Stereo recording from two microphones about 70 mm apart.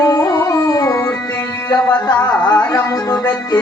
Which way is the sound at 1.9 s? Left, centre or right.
Left.